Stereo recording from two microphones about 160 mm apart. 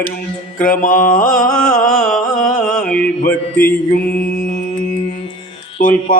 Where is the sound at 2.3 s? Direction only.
55° left (ahead or behind).